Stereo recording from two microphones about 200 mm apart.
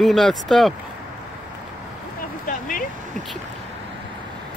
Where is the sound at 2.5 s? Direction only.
45° left (ahead or behind).